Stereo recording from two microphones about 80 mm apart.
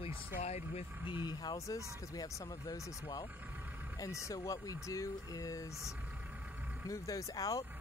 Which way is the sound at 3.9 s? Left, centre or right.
Left.